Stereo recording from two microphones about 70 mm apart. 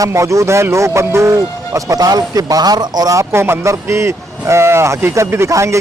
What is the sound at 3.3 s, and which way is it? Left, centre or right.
A man's voice, right.